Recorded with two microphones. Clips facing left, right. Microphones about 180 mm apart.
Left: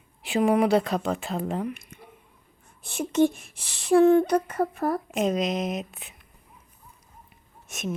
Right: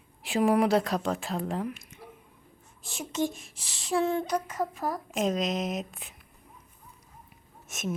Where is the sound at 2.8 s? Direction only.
60° left (ahead or behind).